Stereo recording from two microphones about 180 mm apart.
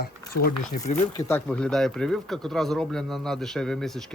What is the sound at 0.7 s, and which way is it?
Speech, 40° left (ahead or behind).